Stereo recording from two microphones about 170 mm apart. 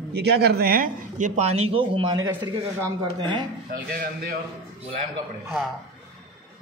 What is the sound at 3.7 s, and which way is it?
Speech, 60° right (ahead or behind).